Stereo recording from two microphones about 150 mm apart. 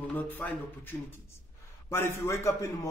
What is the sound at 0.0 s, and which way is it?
A man's voice, 10° left (ahead or behind).